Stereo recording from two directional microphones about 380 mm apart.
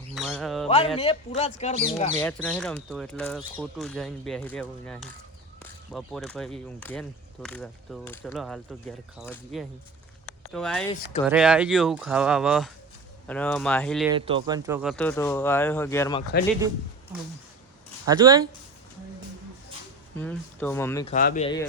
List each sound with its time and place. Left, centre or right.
0.1 s a sound: centre
0.9 s speech: centre
2.1 s speech: centre
14.1 s speech: centre
18.0 s speech: centre
20.1 s speech: centre
21.1 s speech: centre